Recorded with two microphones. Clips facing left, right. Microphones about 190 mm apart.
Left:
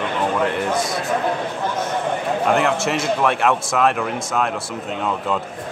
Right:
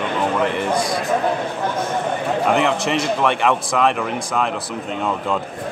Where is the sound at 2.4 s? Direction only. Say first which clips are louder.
Even; centre (ahead or behind).